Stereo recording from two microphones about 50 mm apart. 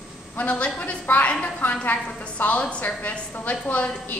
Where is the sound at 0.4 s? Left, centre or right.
Left.